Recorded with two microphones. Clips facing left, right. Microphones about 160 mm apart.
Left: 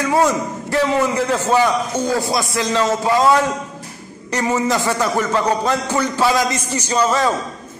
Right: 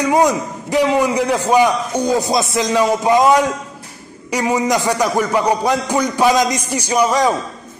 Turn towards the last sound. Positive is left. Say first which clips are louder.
# right 2 dB
turn(degrees=-15)  # may be behind; listen again after turning